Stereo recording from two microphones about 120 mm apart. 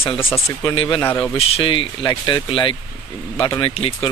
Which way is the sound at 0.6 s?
40° left (ahead or behind).